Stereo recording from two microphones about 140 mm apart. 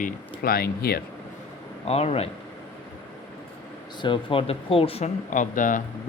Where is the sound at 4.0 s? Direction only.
35° left (ahead or behind).